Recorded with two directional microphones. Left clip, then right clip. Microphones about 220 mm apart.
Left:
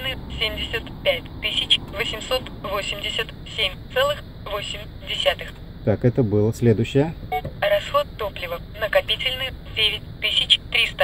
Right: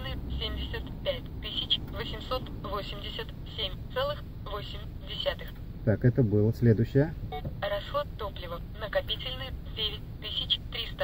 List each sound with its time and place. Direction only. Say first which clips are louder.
0.1 s speech: left 12 dB; 60° left (ahead or behind)
5.9 s speech: left 7 dB; 25° left (ahead or behind)
7.2 s speech: left 12 dB; 60° left (ahead or behind)